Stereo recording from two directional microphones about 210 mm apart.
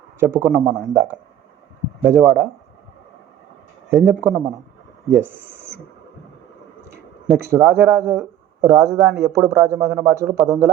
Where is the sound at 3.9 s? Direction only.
5° right (ahead or behind).